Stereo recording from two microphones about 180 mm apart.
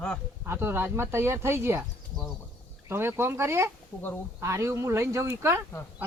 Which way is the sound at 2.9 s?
15° right (ahead or behind).